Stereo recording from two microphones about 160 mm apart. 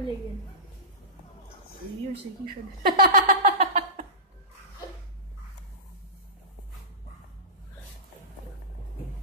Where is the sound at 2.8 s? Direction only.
65° right (ahead or behind); by 4.0 s 50° right (ahead or behind).